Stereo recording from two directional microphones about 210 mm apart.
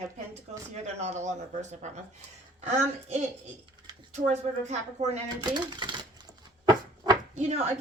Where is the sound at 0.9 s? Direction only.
35° right (ahead or behind).